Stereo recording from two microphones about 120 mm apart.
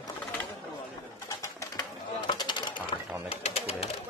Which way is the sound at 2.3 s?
40° left (ahead or behind).